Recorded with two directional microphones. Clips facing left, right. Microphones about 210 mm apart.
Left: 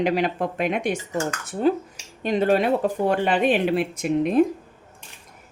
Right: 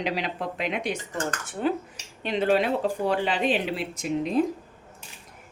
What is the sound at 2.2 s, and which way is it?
Speech, 45° left (ahead or behind).